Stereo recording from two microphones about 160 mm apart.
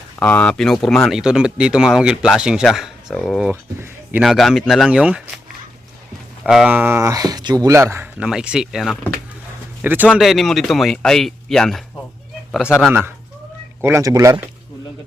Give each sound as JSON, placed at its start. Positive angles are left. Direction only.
{"t": 0.2, "sound": "speech", "side_deg": 10}
{"t": 3.5, "sound": "speech", "side_deg": -15}
{"t": 4.2, "sound": "speech", "side_deg": 0}
{"t": 6.4, "sound": "speech", "side_deg": -5}
{"t": 8.3, "sound": "speech", "side_deg": -5}
{"t": 10.2, "sound": "speech", "side_deg": 0}
{"t": 12.9, "sound": "speech", "side_deg": -10}